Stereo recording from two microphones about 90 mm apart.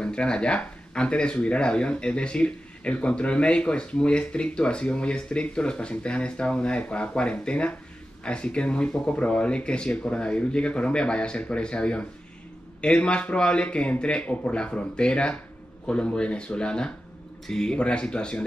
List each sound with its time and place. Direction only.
0.0 s speech: 10° left (ahead or behind)